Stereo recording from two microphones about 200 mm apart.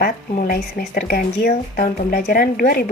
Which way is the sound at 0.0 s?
45° left (ahead or behind).